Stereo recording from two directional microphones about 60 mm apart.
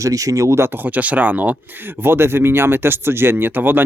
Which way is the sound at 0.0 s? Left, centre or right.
Right.